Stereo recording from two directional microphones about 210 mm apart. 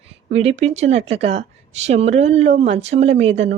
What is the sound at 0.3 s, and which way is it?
A woman's voice, 30° right (ahead or behind).